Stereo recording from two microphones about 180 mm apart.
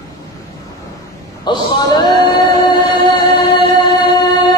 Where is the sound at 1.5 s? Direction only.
25° left (ahead or behind).